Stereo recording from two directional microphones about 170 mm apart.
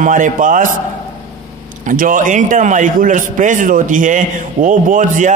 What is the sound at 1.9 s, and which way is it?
A man's voice, 50° right (ahead or behind).